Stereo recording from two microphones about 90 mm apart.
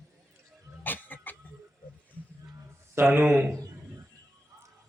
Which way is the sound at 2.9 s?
25° right (ahead or behind).